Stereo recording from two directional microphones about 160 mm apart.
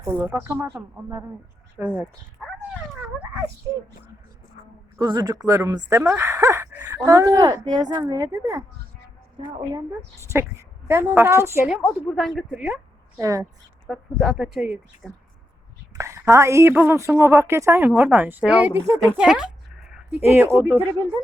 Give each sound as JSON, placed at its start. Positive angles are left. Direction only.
{"t": 0.0, "sound": "a woman's voice", "side_deg": -15}
{"t": 3.0, "sound": "dog", "side_deg": -10}
{"t": 4.9, "sound": "speech", "side_deg": -30}
{"t": 10.3, "sound": "a woman's voice", "side_deg": -15}
{"t": 11.7, "sound": "speech", "side_deg": 0}
{"t": 13.1, "sound": "speech", "side_deg": -20}
{"t": 13.8, "sound": "speech", "side_deg": 0}
{"t": 16.0, "sound": "a woman's voice", "side_deg": -20}